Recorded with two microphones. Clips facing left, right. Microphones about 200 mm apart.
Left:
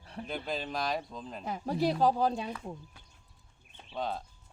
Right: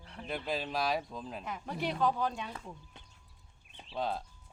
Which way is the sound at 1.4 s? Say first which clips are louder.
Left 8 dB; 35° left (ahead or behind).